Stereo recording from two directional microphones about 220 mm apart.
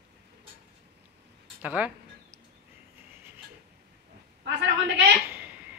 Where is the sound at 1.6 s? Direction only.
5° right (ahead or behind).